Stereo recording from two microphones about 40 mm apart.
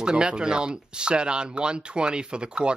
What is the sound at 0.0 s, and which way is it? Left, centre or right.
Speech, right.